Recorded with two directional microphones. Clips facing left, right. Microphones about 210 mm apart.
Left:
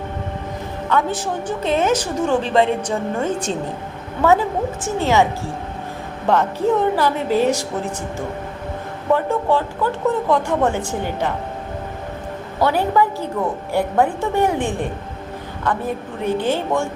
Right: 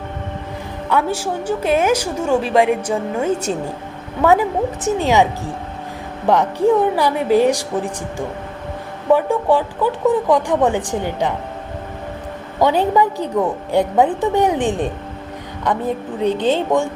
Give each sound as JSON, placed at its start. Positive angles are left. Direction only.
{"t": 0.9, "sound": "a woman's voice", "side_deg": -10}
{"t": 6.2, "sound": "a woman's voice", "side_deg": -15}
{"t": 9.1, "sound": "a woman's voice", "side_deg": -15}
{"t": 12.5, "sound": "a woman's voice", "side_deg": -15}
{"t": 16.2, "sound": "a woman's voice", "side_deg": -20}